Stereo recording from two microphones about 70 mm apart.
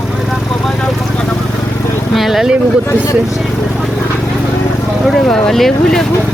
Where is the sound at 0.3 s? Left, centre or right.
Centre.